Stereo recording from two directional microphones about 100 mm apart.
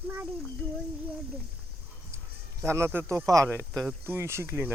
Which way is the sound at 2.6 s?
30° right (ahead or behind).